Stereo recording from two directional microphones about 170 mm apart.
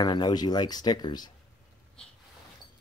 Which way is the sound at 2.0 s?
5° left (ahead or behind).